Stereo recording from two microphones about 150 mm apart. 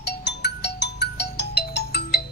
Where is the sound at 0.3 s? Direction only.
90° left.